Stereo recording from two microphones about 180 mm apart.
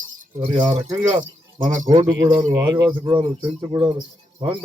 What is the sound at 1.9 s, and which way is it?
Speech, 30° right (ahead or behind).